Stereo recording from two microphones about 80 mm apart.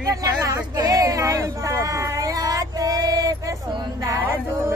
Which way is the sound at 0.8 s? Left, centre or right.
Right.